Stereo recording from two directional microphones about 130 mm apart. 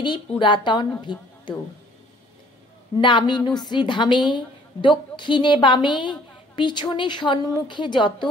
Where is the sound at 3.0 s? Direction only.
35° left (ahead or behind).